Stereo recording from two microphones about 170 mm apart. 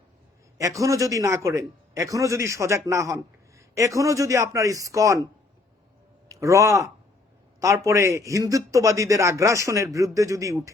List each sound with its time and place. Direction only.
0.6 s a man's voice: 20° right (ahead or behind)